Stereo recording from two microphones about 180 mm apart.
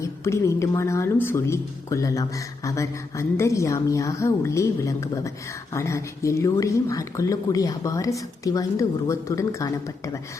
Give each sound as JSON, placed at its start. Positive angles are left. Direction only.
{"t": 0.0, "sound": "speech", "side_deg": 15}